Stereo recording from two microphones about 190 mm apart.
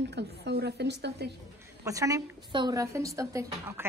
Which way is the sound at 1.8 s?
15° right (ahead or behind).